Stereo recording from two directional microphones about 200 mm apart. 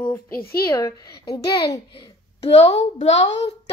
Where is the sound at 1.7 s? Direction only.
25° left (ahead or behind).